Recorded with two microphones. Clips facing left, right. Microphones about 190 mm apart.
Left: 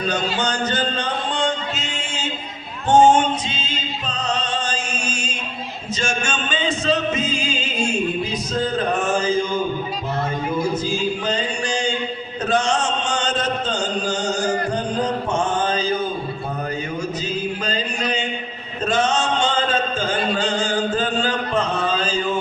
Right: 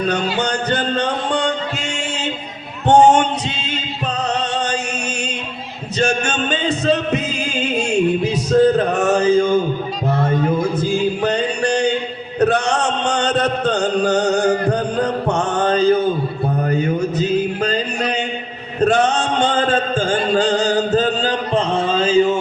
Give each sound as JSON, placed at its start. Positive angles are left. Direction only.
{"t": 0.1, "sound": "music", "side_deg": -60}
{"t": 2.8, "sound": "a sound", "side_deg": -65}
{"t": 4.2, "sound": "music", "side_deg": -65}
{"t": 10.9, "sound": "music", "side_deg": -65}
{"t": 12.4, "sound": "chant", "side_deg": -65}
{"t": 16.6, "sound": "music", "side_deg": -60}
{"t": 18.8, "sound": "a sound", "side_deg": -60}
{"t": 20.4, "sound": "chant", "side_deg": -35}